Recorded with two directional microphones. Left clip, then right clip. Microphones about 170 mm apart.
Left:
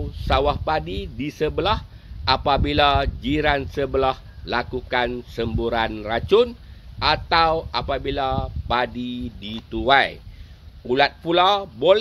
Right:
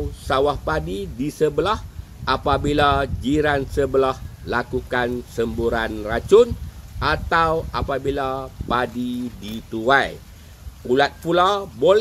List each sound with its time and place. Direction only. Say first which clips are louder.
0.2 s a man's voice: right 1 dB; 30° left (ahead or behind)